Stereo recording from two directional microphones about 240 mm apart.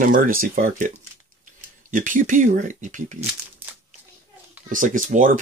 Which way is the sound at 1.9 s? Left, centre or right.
Right.